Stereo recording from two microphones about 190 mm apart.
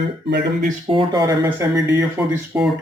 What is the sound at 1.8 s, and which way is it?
Speech, 5° right (ahead or behind).